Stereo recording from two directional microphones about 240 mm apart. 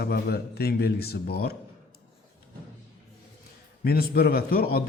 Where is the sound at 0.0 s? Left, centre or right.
Left.